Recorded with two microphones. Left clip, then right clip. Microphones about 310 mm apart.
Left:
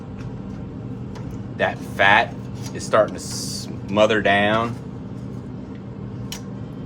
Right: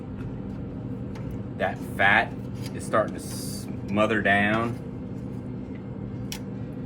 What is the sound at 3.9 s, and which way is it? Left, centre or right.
Speech, left.